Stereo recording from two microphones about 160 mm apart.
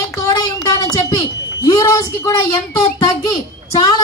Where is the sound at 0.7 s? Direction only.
20° left (ahead or behind).